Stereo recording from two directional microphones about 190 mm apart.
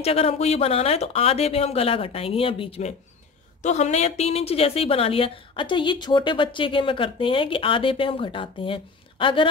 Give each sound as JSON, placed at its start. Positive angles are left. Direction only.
{"t": 0.0, "sound": "a woman's voice", "side_deg": 30}